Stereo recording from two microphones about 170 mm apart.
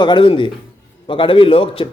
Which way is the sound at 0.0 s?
30° left (ahead or behind).